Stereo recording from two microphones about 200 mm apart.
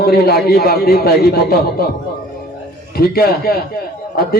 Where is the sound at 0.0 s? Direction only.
50° left (ahead or behind).